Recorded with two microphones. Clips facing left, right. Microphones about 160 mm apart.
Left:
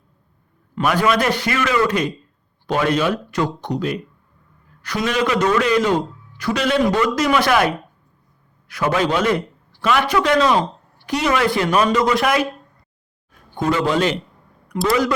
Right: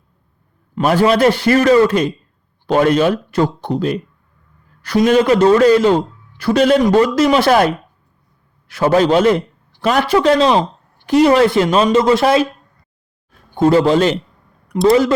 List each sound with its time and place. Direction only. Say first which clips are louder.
0.9 s a man's voice: right 6 dB; 30° right (ahead or behind)
2.7 s a man's voice: right 6 dB; 45° right (ahead or behind); by 12.5 s 30° right (ahead or behind)
13.6 s a man's voice: right 7 dB; 35° right (ahead or behind)